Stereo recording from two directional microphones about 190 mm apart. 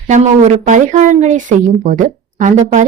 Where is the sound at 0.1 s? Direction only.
40° right (ahead or behind).